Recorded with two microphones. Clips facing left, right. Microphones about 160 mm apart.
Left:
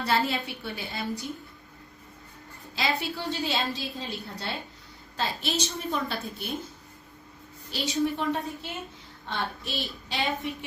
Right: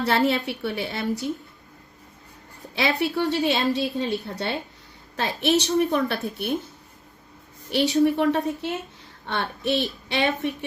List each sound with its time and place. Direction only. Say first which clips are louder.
0.0 s a woman's voice: right 5 dB; 70° right (ahead or behind)
3.0 s a woman's voice: right 9 dB; 70° right (ahead or behind)
7.7 s a woman's voice: right 8 dB; 70° right (ahead or behind)